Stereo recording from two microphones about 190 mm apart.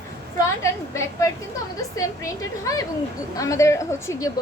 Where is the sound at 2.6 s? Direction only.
20° left (ahead or behind).